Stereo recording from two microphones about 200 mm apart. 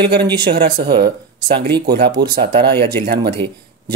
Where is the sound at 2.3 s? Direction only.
55° right (ahead or behind).